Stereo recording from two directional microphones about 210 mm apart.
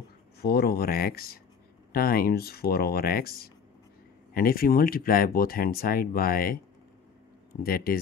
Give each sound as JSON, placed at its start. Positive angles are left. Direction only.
{"t": 0.4, "sound": "speech", "side_deg": 50}
{"t": 7.6, "sound": "speech", "side_deg": 45}